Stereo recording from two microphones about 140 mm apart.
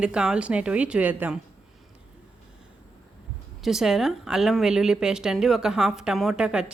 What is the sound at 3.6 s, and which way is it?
Speech, centre (ahead or behind).